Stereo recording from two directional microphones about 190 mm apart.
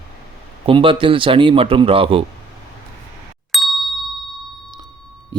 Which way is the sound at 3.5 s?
Centre (ahead or behind).